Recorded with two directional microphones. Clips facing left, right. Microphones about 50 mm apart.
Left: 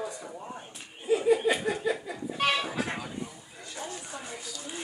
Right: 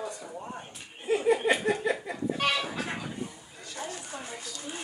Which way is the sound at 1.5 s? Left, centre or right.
Right.